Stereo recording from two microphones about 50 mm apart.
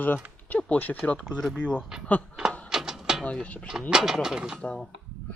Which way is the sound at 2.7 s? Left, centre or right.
Centre.